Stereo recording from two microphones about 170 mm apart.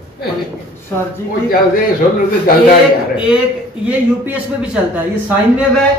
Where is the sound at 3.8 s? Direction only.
10° right (ahead or behind).